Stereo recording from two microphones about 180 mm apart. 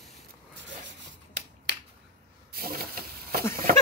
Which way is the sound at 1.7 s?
80° right.